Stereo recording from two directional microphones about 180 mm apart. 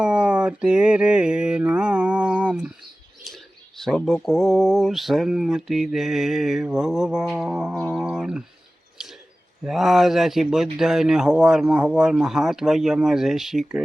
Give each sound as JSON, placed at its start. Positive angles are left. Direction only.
{"t": 0.0, "sound": "mantra", "side_deg": -5}
{"t": 3.2, "sound": "speech", "side_deg": 0}
{"t": 9.0, "sound": "a sound", "side_deg": -5}
{"t": 9.6, "sound": "speech", "side_deg": 0}